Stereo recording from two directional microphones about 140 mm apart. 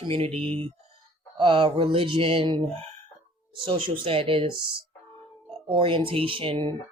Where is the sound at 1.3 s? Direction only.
40° right (ahead or behind).